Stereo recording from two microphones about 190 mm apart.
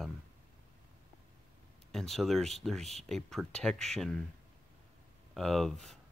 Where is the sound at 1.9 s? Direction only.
Centre (ahead or behind).